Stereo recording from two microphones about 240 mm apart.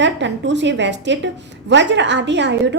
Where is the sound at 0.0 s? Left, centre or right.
Right.